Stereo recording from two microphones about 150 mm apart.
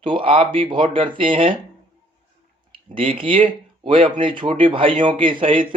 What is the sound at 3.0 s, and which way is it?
Speech, 35° right (ahead or behind).